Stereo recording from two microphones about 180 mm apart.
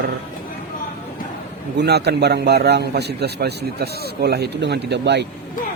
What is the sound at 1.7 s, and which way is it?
A man's voice, 70° right (ahead or behind).